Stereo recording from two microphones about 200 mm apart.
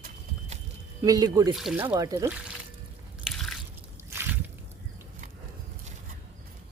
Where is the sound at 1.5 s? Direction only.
5° right (ahead or behind).